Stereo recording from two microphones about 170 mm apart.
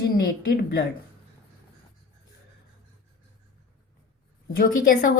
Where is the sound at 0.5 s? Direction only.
75° left (ahead or behind).